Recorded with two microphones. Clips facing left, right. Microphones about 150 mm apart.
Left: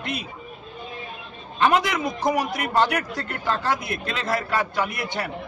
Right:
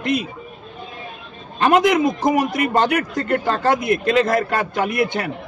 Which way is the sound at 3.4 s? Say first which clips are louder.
Right 6 dB; 50° right (ahead or behind).